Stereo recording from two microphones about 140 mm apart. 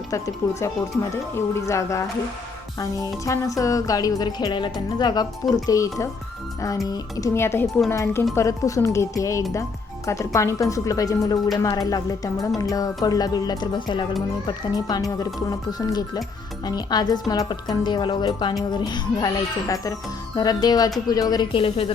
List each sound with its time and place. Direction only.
0.4 s music: 20° left (ahead or behind)
16.6 s speech: 30° left (ahead or behind)
18.7 s music: 30° left (ahead or behind)
21.1 s speech: 30° left (ahead or behind)